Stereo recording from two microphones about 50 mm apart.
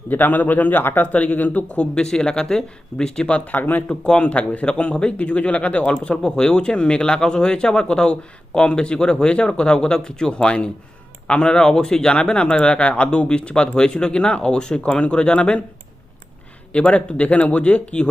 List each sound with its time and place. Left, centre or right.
0.1 s speech: left
1.1 s speech: left
3.4 s speech: left
4.0 s a man's voice: centre
16.7 s a man's voice: left